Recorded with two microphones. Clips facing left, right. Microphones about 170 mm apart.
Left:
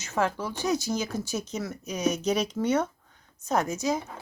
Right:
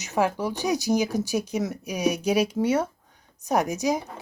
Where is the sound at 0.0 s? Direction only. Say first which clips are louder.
Right 4 dB; 15° right (ahead or behind).